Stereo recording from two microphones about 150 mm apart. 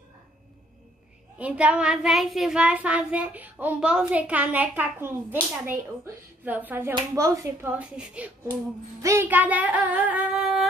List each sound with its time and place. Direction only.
1.4 s child singing: 10° right (ahead or behind)
7.0 s speech: 20° right (ahead or behind)
7.8 s child singing: 10° right (ahead or behind)